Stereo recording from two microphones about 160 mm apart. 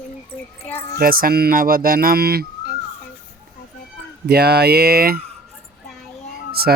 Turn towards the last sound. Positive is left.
turn(degrees=-75)  # may be behind; listen again after turning